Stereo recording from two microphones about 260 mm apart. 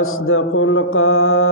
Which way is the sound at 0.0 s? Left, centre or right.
Left.